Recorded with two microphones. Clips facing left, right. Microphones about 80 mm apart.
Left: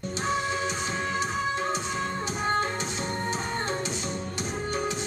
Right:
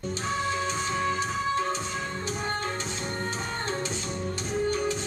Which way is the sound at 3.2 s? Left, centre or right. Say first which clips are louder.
Left 2 dB; centre.